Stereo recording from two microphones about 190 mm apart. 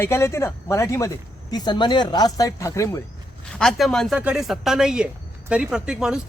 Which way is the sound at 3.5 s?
Centre (ahead or behind).